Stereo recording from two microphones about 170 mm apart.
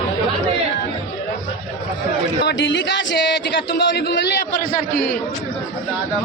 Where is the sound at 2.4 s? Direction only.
90° left.